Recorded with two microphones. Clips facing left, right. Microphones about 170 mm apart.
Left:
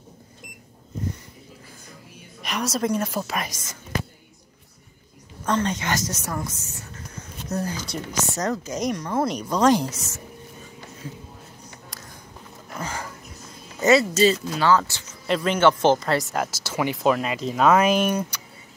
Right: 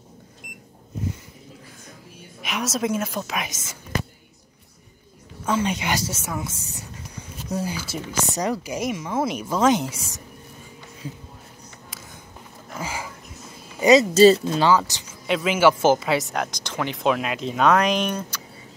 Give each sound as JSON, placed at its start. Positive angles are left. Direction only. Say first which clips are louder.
{"t": 2.4, "sound": "speech", "louder": "even", "side_deg": 0}
{"t": 5.4, "sound": "a woman's voice", "louder": "even", "side_deg": -10}
{"t": 12.7, "sound": "a sound", "louder": "even", "side_deg": -5}
{"t": 14.1, "sound": "speech", "louder": "right 6 dB", "side_deg": -35}
{"t": 14.4, "sound": "a woman's voice", "louder": "right 1 dB", "side_deg": -25}
{"t": 15.2, "sound": "speech", "louder": "right 1 dB", "side_deg": -5}